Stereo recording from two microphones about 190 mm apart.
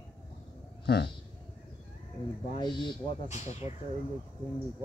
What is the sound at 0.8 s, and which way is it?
Speech, 60° left (ahead or behind).